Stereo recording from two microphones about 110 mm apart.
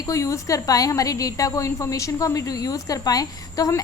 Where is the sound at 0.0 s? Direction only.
30° left (ahead or behind).